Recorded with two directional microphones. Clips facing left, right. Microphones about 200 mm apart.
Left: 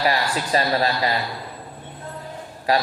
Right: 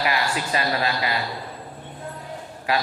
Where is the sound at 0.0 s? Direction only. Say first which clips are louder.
Left 2 dB; 35° left (ahead or behind).